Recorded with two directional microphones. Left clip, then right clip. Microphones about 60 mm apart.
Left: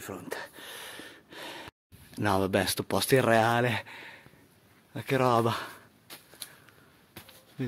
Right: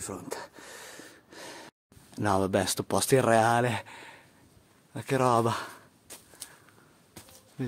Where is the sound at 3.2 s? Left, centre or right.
Centre.